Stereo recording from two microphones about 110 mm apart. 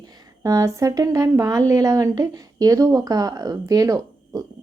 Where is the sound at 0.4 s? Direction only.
30° right (ahead or behind).